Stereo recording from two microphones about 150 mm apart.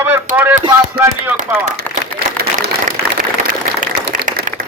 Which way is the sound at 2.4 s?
90° right.